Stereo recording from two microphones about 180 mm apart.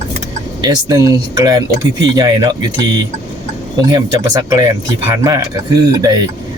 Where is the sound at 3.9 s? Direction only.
20° right (ahead or behind).